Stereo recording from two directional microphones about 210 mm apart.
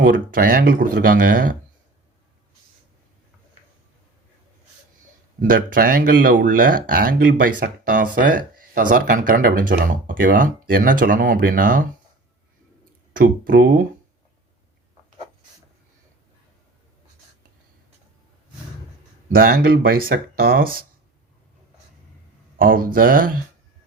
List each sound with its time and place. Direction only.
0.0 s speech: 40° right (ahead or behind)
5.4 s speech: 40° right (ahead or behind)
13.1 s speech: 40° right (ahead or behind)
19.3 s speech: 45° right (ahead or behind)
22.5 s speech: 45° right (ahead or behind)